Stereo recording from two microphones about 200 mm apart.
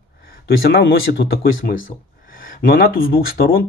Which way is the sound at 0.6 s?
50° left (ahead or behind).